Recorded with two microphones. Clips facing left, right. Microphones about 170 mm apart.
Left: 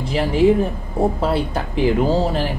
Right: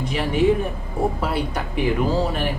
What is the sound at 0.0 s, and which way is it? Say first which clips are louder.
Speech: left 4 dB; 30° left (ahead or behind).